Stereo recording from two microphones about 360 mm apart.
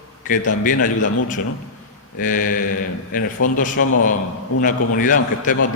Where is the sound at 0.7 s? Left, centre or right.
Left.